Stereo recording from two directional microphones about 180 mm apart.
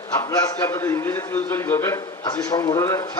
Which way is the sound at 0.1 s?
15° left (ahead or behind).